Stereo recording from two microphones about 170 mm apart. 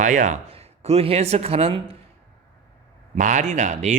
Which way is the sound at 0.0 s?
45° right (ahead or behind).